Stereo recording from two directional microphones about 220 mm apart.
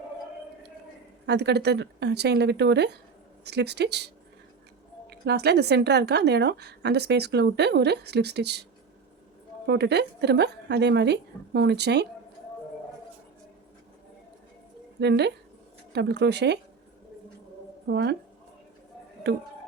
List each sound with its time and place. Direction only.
1.3 s speech: 50° right (ahead or behind)
9.6 s speech: 50° right (ahead or behind)
15.0 s speech: 50° right (ahead or behind)
17.8 s speech: 50° right (ahead or behind)